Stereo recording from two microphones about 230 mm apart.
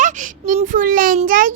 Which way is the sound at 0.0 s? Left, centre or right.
Right.